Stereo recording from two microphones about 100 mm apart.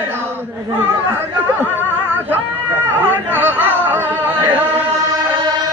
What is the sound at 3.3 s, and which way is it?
Music, 20° right (ahead or behind).